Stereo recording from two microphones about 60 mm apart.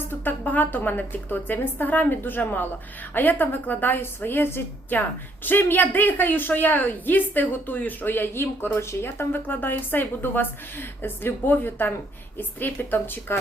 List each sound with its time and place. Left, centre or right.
0.0 s speech: left